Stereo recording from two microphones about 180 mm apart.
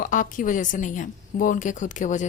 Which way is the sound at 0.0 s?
45° left (ahead or behind).